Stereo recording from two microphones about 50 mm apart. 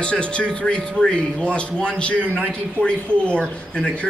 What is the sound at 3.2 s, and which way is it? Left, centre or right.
Speech, left.